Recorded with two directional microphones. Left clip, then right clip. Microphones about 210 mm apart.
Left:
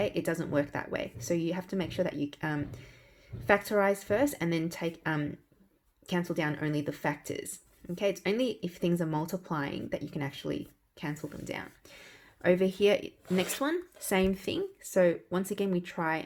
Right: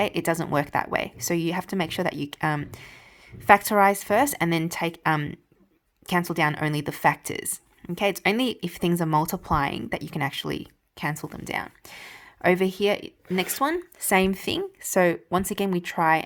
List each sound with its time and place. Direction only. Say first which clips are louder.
0.0 s speech: right 6 dB; 35° right (ahead or behind)